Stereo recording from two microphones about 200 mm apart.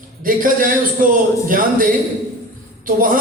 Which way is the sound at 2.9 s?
45° right (ahead or behind).